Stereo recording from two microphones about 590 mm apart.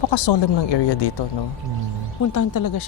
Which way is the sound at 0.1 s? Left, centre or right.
Left.